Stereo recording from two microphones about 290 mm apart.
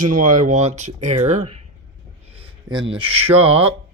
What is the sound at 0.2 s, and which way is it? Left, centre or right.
Speech, right.